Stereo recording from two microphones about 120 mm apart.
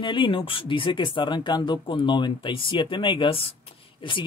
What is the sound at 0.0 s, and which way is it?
Speech, 45° left (ahead or behind).